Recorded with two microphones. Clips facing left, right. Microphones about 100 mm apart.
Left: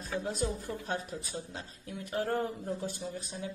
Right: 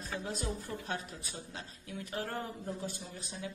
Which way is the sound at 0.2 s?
45° left (ahead or behind).